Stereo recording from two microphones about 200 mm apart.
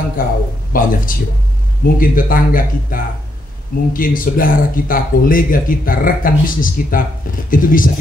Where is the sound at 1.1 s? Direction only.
45° left (ahead or behind).